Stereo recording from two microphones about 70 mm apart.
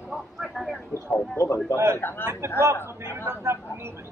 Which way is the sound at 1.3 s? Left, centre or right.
Left.